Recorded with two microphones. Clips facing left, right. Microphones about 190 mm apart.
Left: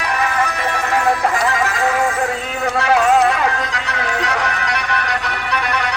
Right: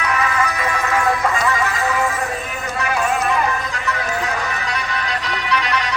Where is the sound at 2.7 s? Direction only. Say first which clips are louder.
Left 7 dB; 80° left.